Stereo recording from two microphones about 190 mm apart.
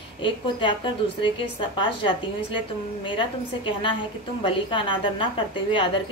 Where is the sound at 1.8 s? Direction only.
25° left (ahead or behind).